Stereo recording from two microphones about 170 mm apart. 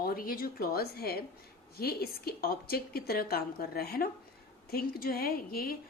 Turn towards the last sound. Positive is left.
turn(degrees=60)  # may be behind; listen again after turning